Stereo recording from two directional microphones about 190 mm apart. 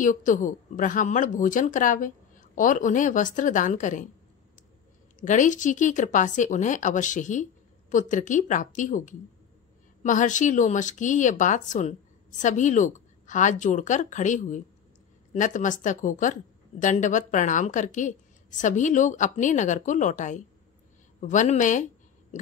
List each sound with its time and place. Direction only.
0.0 s speech: 45° left (ahead or behind)
5.2 s speech: 40° left (ahead or behind)
22.3 s a sound: 40° left (ahead or behind)